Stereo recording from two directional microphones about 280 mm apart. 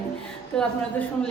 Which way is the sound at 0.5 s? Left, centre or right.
Centre.